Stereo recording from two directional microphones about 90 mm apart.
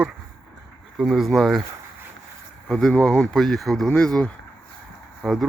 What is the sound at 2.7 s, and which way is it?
Speech, 5° left (ahead or behind).